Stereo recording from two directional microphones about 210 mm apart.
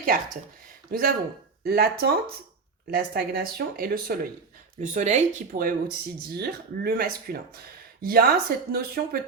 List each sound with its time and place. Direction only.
0.9 s speech: 45° right (ahead or behind)
4.8 s speech: 35° right (ahead or behind)